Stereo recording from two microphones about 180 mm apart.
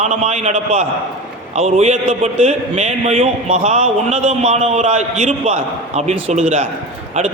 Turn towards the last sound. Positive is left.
turn(degrees=-40)  # may be behind; listen again after turning